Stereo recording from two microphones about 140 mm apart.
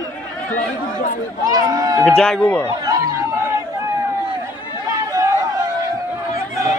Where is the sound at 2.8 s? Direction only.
25° right (ahead or behind).